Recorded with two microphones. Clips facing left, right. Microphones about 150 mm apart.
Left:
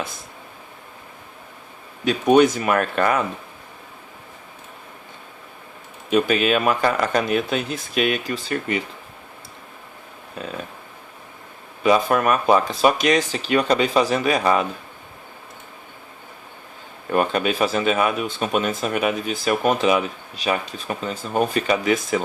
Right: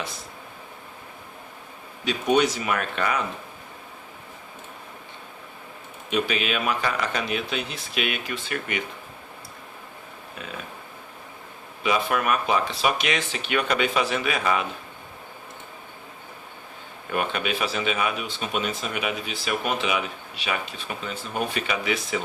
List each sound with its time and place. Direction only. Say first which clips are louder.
2.0 s speech: left 6 dB; 50° left (ahead or behind)
6.1 s speech: left 7 dB; 45° left (ahead or behind)
10.4 s speech: left 7 dB; 35° left (ahead or behind)
11.8 s speech: left 6 dB; 40° left (ahead or behind)
17.1 s speech: left 6 dB; 40° left (ahead or behind)